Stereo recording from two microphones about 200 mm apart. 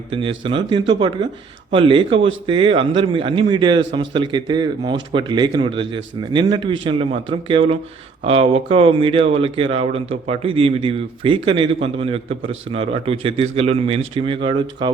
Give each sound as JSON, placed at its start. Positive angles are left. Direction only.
{"t": 0.1, "sound": "a man's voice", "side_deg": -25}